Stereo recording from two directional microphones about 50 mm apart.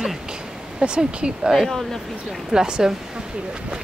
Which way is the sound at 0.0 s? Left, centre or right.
Centre.